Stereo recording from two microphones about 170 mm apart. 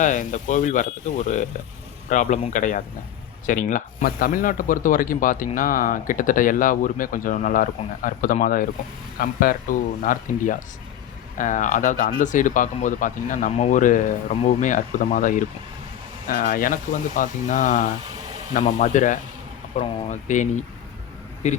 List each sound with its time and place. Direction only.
0.0 s speech: 50° left (ahead or behind)